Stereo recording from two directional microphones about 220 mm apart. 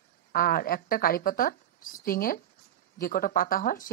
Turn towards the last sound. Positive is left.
turn(degrees=40)  # may be behind; listen again after turning